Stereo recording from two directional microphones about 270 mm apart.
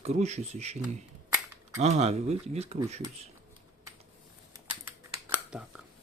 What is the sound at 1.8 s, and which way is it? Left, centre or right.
Speech, right.